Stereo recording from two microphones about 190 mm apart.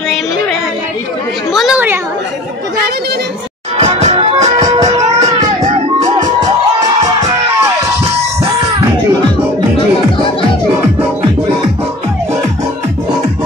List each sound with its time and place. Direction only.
1.5 s speech: centre (ahead or behind)
3.7 s music: 35° right (ahead or behind)
4.6 s music: 20° right (ahead or behind)
5.6 s music: 40° right (ahead or behind)
7.0 s music: 20° right (ahead or behind)